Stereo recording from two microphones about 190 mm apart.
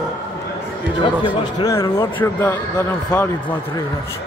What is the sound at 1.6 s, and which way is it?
Speech, 15° left (ahead or behind).